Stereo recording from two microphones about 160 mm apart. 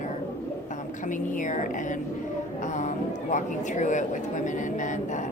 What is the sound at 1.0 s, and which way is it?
Speech, 55° left (ahead or behind).